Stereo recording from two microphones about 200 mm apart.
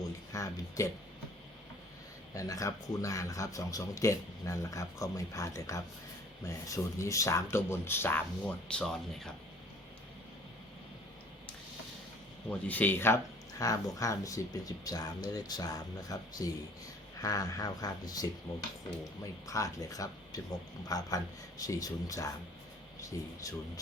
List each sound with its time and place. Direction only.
0.3 s speech: 15° left (ahead or behind)
2.3 s speech: 15° left (ahead or behind)
12.5 s speech: 10° left (ahead or behind)
19.5 s speech: 15° left (ahead or behind)